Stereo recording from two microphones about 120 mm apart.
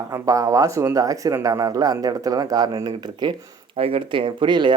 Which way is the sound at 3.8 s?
50° right (ahead or behind).